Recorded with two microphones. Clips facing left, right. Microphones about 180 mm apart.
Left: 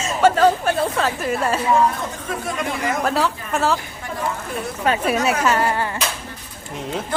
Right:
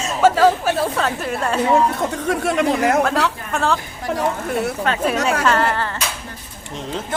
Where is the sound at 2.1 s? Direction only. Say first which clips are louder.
Right 7 dB; 75° right (ahead or behind).